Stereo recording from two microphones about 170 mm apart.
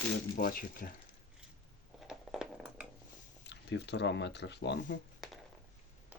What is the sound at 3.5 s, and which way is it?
Speech, 90° left.